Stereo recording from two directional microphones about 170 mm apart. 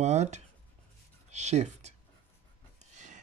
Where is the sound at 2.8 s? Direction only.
45° right (ahead or behind).